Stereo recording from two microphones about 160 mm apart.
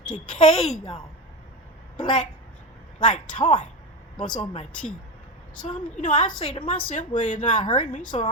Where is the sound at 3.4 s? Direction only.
50° left (ahead or behind).